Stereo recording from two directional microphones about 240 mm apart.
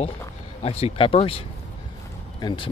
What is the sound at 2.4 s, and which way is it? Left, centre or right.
Speech, left.